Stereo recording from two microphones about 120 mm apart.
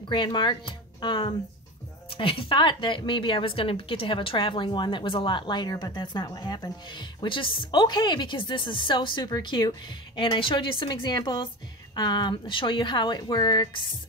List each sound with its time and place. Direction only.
0.1 s a woman's voice: 40° left (ahead or behind)